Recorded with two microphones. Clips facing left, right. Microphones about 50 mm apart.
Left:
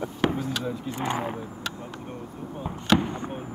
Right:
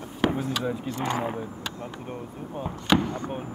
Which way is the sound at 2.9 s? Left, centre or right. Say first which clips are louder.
Right 1 dB; left.